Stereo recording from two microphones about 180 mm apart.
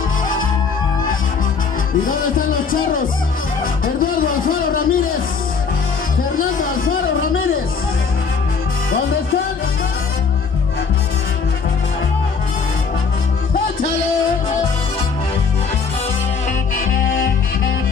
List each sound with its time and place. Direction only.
2.7 s speech: 50° left (ahead or behind)
3.8 s music: 50° left (ahead or behind)
6.3 s music: 50° left (ahead or behind)